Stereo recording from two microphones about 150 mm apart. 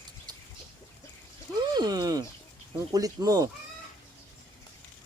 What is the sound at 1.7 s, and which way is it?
Speech, 25° right (ahead or behind).